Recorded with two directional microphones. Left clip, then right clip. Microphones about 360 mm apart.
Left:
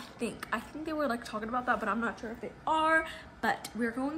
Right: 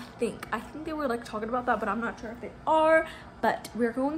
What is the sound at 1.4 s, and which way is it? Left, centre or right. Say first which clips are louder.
A woman's voice: right 3 dB; centre.